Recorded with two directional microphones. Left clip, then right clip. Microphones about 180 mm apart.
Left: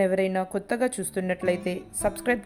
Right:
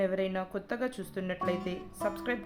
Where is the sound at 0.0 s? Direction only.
30° left (ahead or behind).